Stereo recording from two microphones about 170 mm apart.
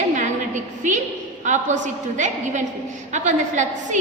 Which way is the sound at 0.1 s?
45° right (ahead or behind).